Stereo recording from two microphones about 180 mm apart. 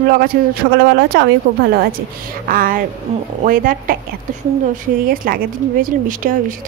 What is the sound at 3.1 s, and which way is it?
Speech, 35° right (ahead or behind).